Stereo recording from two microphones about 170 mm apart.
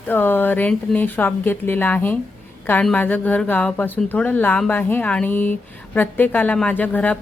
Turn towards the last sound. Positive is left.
turn(degrees=10)  # may be behind; listen again after turning